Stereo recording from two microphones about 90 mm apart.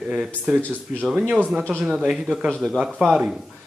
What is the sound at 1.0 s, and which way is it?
Speech, 10° right (ahead or behind).